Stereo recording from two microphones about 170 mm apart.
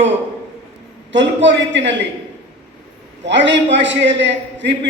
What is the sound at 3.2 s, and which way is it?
A man's voice, 90° right.